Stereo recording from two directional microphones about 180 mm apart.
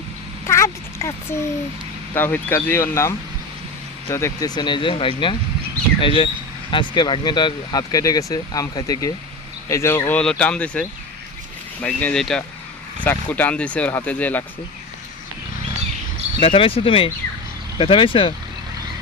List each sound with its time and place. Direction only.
0.4 s a sound: 15° left (ahead or behind)
2.1 s speech: 10° left (ahead or behind)
16.4 s speech: 30° left (ahead or behind)